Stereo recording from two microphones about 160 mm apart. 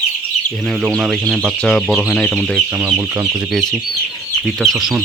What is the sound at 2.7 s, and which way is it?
Speech, 10° right (ahead or behind).